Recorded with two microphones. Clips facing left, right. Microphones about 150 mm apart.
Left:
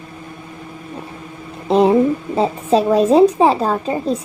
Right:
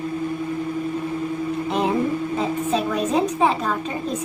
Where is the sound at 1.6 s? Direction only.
35° left (ahead or behind).